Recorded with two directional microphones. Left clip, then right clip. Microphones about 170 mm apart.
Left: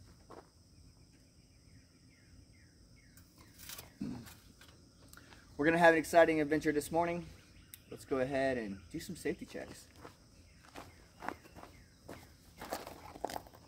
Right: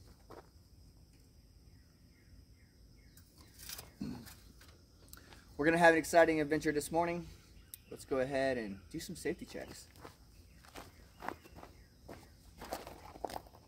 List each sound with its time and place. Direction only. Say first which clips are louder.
0.3 s a sound: even; 25° right (ahead or behind)
3.6 s a sound: even; 15° right (ahead or behind)
5.1 s speech: even; 15° right (ahead or behind)
9.7 s walk: even; 30° right (ahead or behind)
10.7 s walk: left 1 dB; 15° right (ahead or behind)
11.6 s walk: left 1 dB; 10° left (ahead or behind)